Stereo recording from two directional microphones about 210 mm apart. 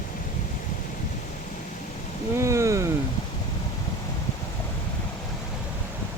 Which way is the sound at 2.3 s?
15° right (ahead or behind).